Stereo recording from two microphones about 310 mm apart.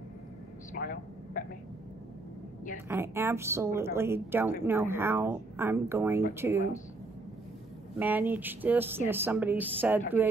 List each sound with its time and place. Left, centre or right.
0.7 s speech: left
2.9 s a woman's voice: centre
8.0 s speech: centre